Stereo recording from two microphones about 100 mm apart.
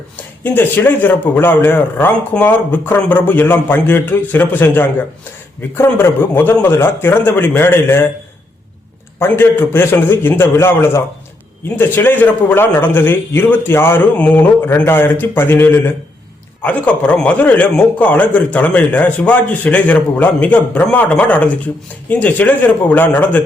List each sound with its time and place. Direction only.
0.4 s speech: 20° left (ahead or behind)
9.1 s a man's voice: 20° left (ahead or behind)